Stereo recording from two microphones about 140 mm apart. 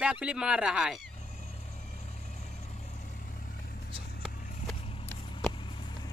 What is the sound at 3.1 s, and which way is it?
Vehicle, 70° left (ahead or behind).